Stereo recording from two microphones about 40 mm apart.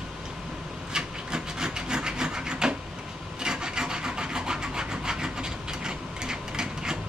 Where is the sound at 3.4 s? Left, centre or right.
Centre.